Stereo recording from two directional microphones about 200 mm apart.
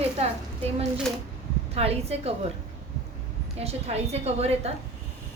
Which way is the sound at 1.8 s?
30° right (ahead or behind).